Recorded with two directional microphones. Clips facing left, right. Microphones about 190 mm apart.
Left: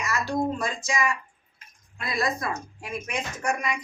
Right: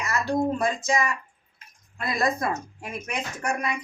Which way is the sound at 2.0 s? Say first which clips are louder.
Right 3 dB; 50° right (ahead or behind).